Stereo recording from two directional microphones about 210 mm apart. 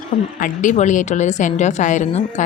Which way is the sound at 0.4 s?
35° left (ahead or behind).